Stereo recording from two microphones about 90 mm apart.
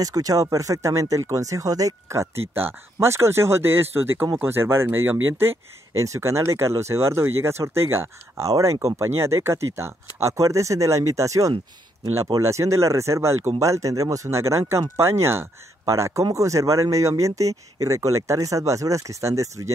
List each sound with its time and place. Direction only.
0.0 s speech: 40° right (ahead or behind)